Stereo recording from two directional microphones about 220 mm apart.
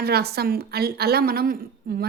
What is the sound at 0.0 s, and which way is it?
A woman's voice, 45° right (ahead or behind).